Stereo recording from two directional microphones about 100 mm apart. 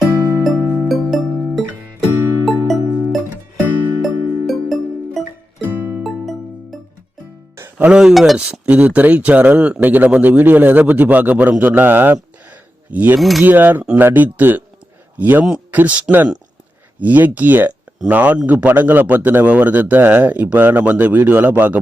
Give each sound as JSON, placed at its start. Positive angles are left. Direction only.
{"t": 0.4, "sound": "music", "side_deg": 0}
{"t": 5.6, "sound": "music", "side_deg": -20}
{"t": 6.0, "sound": "music", "side_deg": 0}
{"t": 7.5, "sound": "music", "side_deg": -30}
{"t": 7.9, "sound": "a man's voice", "side_deg": -5}
{"t": 12.5, "sound": "a sound", "side_deg": -15}
{"t": 13.1, "sound": "speech", "side_deg": 0}
{"t": 13.4, "sound": "a man's voice", "side_deg": -20}